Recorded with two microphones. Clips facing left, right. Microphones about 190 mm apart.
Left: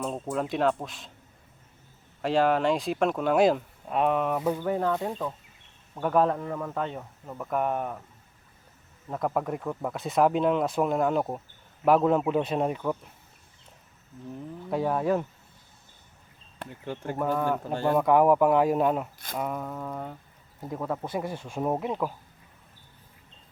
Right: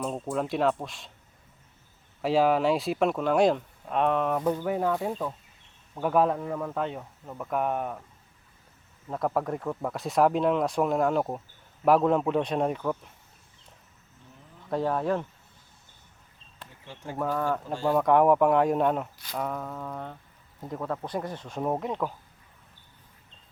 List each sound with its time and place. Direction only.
0.0 s speech: centre (ahead or behind)
2.2 s speech: 5° right (ahead or behind)
4.6 s speech: 5° right (ahead or behind)
9.0 s speech: centre (ahead or behind)
14.7 s speech: 5° left (ahead or behind)
16.6 s speech: 55° left (ahead or behind)
17.9 s speech: 5° left (ahead or behind)